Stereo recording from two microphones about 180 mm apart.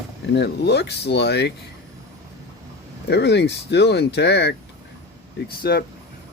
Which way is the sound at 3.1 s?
70° left (ahead or behind).